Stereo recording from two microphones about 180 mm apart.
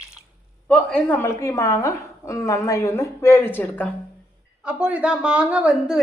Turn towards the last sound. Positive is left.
turn(degrees=-5)  # may be behind; listen again after turning